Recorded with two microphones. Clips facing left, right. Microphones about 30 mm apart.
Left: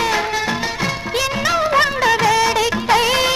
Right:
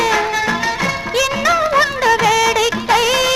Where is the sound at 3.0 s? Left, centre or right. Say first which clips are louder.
Right 1 dB; left.